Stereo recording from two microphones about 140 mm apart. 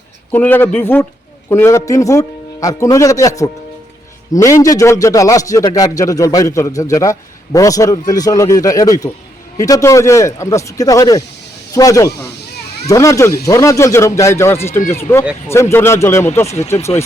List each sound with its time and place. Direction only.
0.3 s a man's voice: 15° left (ahead or behind)